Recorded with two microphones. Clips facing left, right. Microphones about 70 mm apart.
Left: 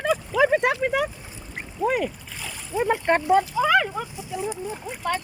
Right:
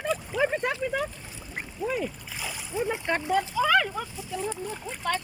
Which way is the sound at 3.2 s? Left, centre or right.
Left.